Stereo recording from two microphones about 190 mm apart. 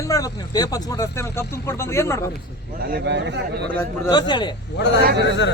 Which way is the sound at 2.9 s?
65° right (ahead or behind).